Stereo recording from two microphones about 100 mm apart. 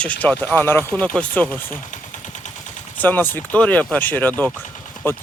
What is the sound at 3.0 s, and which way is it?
Speech, 20° left (ahead or behind).